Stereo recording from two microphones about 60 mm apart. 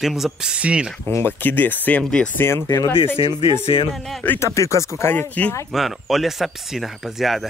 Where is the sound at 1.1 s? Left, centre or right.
Left.